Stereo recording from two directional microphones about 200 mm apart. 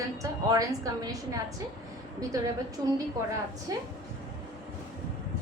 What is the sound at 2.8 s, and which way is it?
A woman's voice, 20° right (ahead or behind).